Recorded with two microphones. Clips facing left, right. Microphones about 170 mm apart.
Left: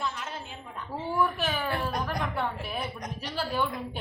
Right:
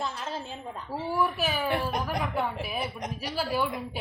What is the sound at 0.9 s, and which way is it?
Speech, 10° right (ahead or behind).